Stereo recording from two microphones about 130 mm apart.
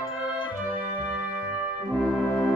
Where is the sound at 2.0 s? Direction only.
5° right (ahead or behind).